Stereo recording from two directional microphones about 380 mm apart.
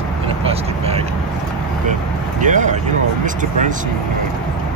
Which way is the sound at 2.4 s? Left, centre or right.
Centre.